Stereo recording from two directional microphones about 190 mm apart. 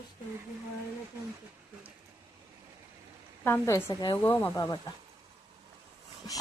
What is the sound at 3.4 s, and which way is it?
A woman's voice, 15° left (ahead or behind).